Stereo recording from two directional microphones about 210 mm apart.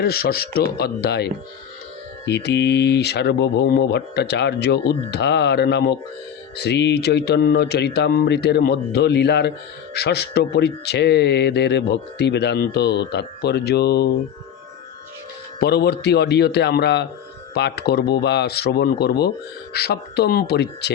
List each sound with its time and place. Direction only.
0.0 s speech: 45° left (ahead or behind)
15.6 s speech: 50° left (ahead or behind)